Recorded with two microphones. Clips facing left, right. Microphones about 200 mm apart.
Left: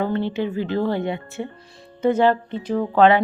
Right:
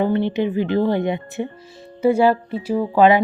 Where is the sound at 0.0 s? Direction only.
15° right (ahead or behind).